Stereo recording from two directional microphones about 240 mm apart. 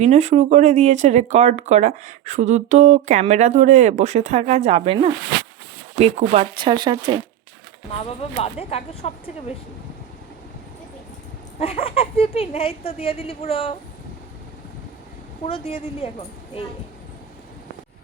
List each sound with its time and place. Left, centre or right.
0.0 s speech: right
7.9 s speech: left
11.6 s speech: left
15.4 s speech: left